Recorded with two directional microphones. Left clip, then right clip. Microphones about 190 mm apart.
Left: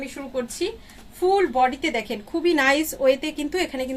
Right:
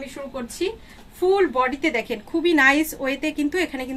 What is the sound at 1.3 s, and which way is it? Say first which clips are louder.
A woman's voice: left 1 dB; 15° right (ahead or behind).